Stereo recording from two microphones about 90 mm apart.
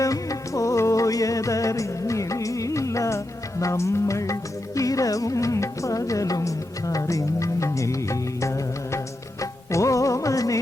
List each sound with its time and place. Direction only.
0.0 s music: 40° left (ahead or behind)